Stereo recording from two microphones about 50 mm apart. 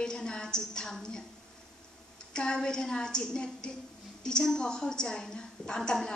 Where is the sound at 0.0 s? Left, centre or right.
Centre.